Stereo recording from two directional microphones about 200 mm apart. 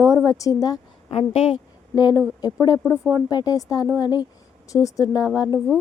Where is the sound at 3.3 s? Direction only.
20° left (ahead or behind).